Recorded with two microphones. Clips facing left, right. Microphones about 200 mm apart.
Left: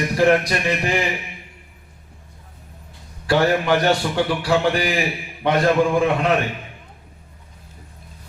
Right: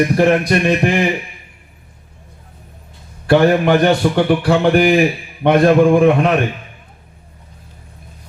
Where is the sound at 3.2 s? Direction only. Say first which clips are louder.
Right 6 dB; 55° right (ahead or behind).